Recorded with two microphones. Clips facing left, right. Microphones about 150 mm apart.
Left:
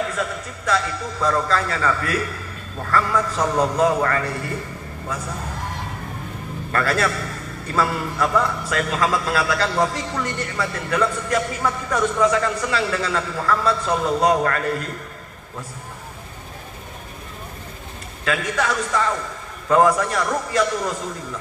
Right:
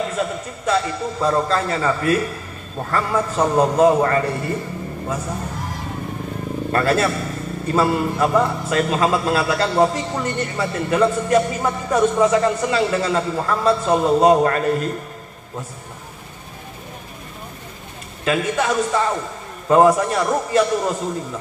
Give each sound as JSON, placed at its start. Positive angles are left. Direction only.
{"t": 0.0, "sound": "a man's voice", "side_deg": -25}
{"t": 6.7, "sound": "a man's voice", "side_deg": -25}
{"t": 18.2, "sound": "a man's voice", "side_deg": -25}